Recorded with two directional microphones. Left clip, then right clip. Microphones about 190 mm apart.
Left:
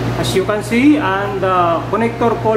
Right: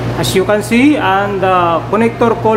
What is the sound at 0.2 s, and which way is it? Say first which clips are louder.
Speech: right 5 dB; 50° right (ahead or behind).